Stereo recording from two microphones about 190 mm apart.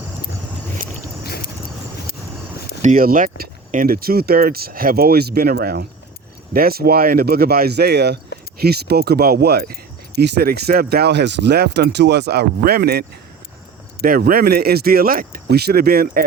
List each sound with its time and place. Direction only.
2.8 s speech: 45° right (ahead or behind)